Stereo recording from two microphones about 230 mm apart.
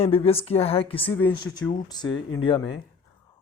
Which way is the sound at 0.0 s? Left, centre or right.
Left.